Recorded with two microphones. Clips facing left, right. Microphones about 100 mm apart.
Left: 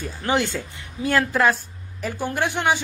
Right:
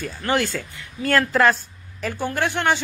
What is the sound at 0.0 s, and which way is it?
Speech, 15° left (ahead or behind).